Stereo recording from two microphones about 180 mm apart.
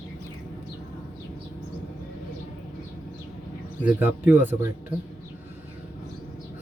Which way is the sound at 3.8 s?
10° right (ahead or behind).